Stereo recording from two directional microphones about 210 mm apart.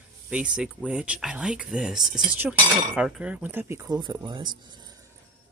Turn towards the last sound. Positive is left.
turn(degrees=-20)  # may be behind; listen again after turning